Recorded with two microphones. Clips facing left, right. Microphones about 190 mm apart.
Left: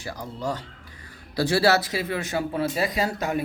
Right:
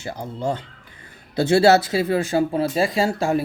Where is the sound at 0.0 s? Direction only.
25° right (ahead or behind).